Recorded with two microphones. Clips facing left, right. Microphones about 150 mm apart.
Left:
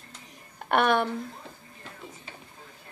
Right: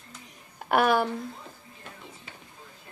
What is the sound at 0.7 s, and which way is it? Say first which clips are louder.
Speech: right 1 dB; 5° right (ahead or behind).